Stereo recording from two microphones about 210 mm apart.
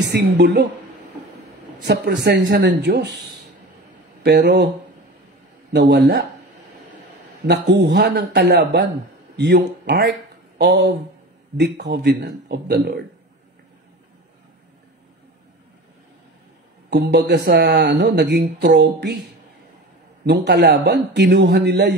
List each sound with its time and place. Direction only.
0.1 s speech: 50° right (ahead or behind)
2.2 s speech: 55° right (ahead or behind)
4.2 s speech: 50° right (ahead or behind)
5.7 s speech: 55° right (ahead or behind)
7.4 s a man's voice: 50° right (ahead or behind)
16.9 s speech: 55° right (ahead or behind)
20.2 s speech: 55° right (ahead or behind)